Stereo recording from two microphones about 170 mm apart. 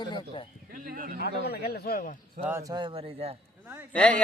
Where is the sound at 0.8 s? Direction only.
55° right (ahead or behind).